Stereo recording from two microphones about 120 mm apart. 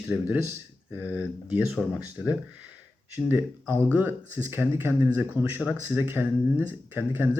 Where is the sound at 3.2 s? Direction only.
15° right (ahead or behind).